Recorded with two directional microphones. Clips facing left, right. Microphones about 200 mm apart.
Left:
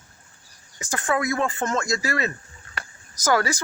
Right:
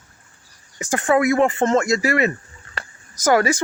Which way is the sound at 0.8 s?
25° right (ahead or behind).